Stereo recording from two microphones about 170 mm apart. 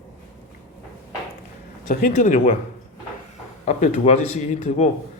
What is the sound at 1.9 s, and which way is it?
Speech, 50° left (ahead or behind).